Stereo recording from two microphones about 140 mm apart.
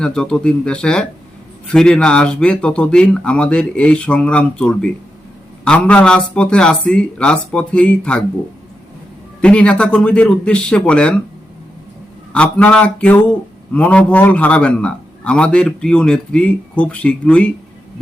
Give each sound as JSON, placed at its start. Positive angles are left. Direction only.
{"t": 0.0, "sound": "a man's voice", "side_deg": 5}
{"t": 9.4, "sound": "a man's voice", "side_deg": 10}
{"t": 12.3, "sound": "a man's voice", "side_deg": 10}